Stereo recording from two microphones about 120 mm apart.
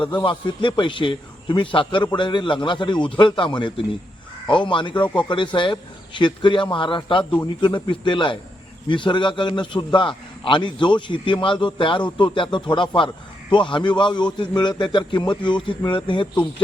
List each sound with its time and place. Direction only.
0.2 s a man's voice: 40° left (ahead or behind)